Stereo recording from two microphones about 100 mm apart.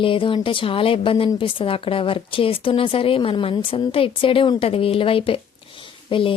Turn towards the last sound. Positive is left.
turn(degrees=60)  # may be behind; listen again after turning